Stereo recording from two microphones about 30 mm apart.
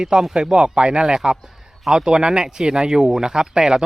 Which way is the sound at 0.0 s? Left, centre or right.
Right.